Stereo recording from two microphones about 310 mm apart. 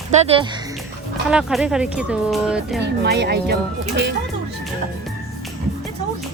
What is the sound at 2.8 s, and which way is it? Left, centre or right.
Speech, right.